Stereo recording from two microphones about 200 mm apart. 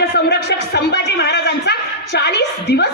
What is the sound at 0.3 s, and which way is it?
A man's voice, 55° left (ahead or behind).